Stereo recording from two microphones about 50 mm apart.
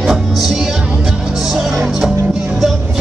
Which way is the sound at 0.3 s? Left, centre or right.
Centre.